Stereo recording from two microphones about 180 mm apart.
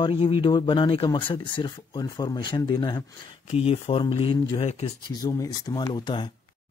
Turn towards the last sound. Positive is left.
turn(degrees=20)  # may be behind; listen again after turning